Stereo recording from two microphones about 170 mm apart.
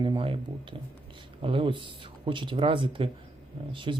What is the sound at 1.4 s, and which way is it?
Speech, 30° right (ahead or behind).